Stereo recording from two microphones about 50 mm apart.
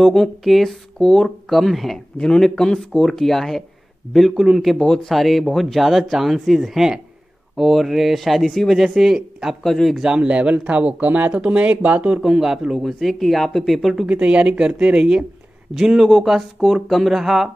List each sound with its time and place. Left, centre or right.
0.0 s speech: centre
2.1 s speech: centre
4.7 s speech: centre
5.1 s speech: centre
9.6 s speech: centre
10.0 s speech: centre
12.2 s speech: centre
12.7 s speech: centre
14.0 s speech: right
15.7 s speech: centre